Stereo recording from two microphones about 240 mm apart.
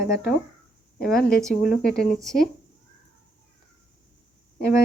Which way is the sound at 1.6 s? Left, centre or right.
Left.